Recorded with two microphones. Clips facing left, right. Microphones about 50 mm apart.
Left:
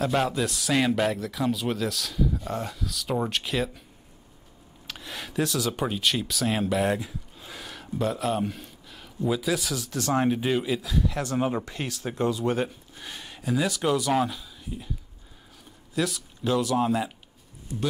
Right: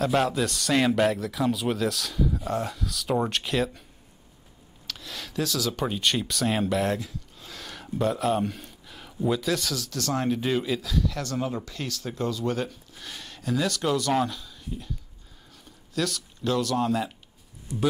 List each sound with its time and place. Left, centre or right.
0.0 s speech: centre
4.8 s a sound: centre
5.8 s speech: centre
7.7 s speech: centre
9.8 s speech: left
11.1 s speech: left